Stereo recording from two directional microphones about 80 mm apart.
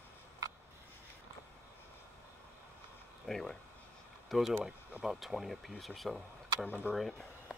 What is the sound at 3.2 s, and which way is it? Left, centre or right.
Speech, centre.